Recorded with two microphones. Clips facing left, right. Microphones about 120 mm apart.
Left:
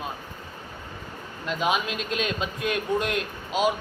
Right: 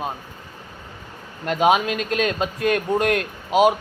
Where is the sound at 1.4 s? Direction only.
60° right (ahead or behind).